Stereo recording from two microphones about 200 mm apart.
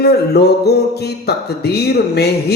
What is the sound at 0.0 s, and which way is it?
A man's voice, 55° left (ahead or behind).